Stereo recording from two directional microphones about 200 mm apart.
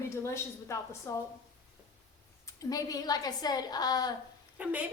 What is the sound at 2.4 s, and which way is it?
Speech, 20° left (ahead or behind).